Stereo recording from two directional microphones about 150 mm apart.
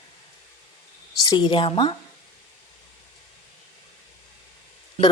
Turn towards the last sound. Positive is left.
turn(degrees=45)  # may be behind; listen again after turning